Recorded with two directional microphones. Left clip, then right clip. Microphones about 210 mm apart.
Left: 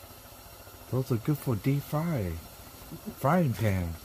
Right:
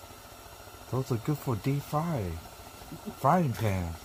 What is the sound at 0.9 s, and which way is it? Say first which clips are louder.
Speech: left 1 dB; 40° left (ahead or behind).